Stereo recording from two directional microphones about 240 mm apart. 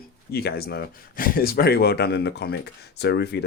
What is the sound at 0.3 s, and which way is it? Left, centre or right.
Speech, left.